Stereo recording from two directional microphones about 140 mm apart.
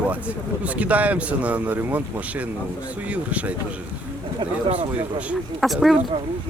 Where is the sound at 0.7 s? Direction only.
10° right (ahead or behind).